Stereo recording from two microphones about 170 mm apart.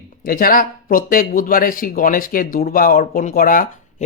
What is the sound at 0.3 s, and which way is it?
Speech, 55° left (ahead or behind).